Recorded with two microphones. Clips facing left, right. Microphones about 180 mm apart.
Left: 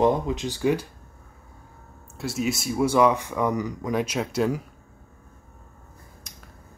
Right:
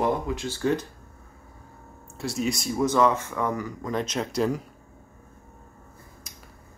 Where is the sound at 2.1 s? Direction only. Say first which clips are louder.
Left 1 dB; 5° left (ahead or behind).